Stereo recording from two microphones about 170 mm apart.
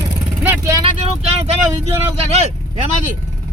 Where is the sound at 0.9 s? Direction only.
40° right (ahead or behind).